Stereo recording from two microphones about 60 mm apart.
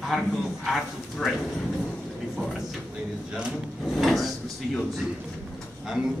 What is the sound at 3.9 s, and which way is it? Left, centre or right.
Speech, centre.